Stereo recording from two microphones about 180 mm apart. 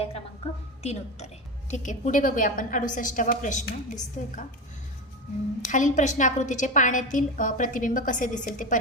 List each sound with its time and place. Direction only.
0.8 s a woman's voice: 35° left (ahead or behind)
5.6 s a woman's voice: 45° left (ahead or behind)